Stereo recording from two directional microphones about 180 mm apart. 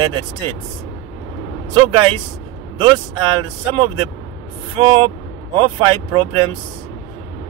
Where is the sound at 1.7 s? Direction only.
30° right (ahead or behind).